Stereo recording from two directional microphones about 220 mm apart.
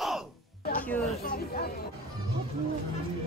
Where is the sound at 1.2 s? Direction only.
45° left (ahead or behind).